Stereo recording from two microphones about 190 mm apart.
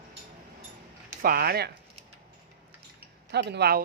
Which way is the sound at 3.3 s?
60° right (ahead or behind).